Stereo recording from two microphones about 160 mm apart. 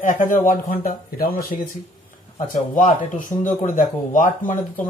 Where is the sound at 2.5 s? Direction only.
55° left (ahead or behind).